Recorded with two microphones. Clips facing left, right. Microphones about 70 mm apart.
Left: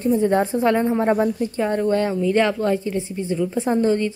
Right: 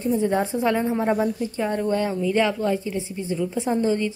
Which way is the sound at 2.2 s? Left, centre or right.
Centre.